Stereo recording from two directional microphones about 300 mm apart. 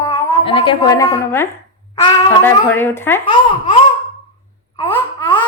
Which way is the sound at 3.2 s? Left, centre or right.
Centre.